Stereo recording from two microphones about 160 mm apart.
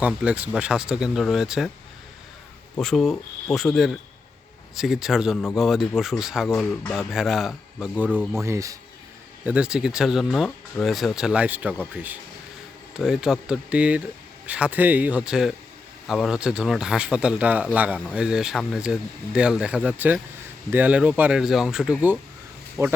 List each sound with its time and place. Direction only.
0.0 s speech: 5° right (ahead or behind)
2.7 s speech: centre (ahead or behind)
8.1 s speech: 5° left (ahead or behind)
8.4 s speech: 20° right (ahead or behind)
9.5 s speech: 5° right (ahead or behind)
12.9 s speech: 5° right (ahead or behind)